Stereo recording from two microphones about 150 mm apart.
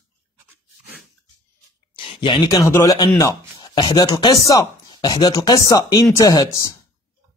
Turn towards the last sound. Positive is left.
turn(degrees=25)  # may be behind; listen again after turning